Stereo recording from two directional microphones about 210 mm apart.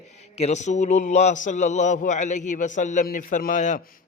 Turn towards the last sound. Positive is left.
turn(degrees=35)  # may be behind; listen again after turning